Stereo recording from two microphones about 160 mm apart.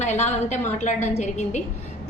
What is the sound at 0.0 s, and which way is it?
A woman's voice, 45° left (ahead or behind).